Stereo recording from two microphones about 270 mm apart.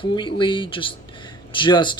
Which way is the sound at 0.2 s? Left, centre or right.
Centre.